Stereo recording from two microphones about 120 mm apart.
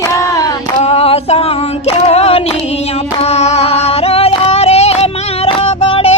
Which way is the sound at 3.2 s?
65° left (ahead or behind).